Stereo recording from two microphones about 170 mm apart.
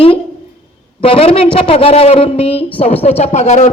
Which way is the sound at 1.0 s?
30° left (ahead or behind).